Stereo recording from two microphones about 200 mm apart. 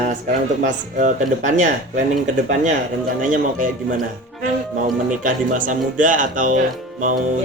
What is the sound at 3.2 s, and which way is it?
Speech, 40° right (ahead or behind).